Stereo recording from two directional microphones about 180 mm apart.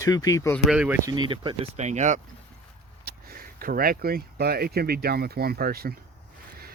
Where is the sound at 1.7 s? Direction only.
40° right (ahead or behind).